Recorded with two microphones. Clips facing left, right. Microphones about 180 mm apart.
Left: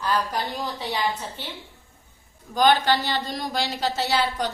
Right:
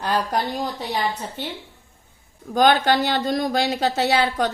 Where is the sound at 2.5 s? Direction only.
55° right (ahead or behind).